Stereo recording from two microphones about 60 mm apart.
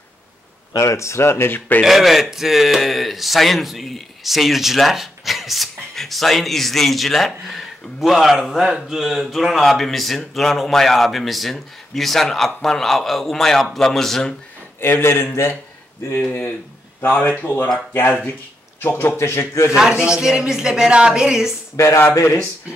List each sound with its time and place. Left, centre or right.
0.7 s speech: left
1.8 s a man's voice: centre
14.8 s a man's voice: left
16.2 s a man's voice: left
18.8 s speech: left
19.7 s speech: centre
21.7 s speech: left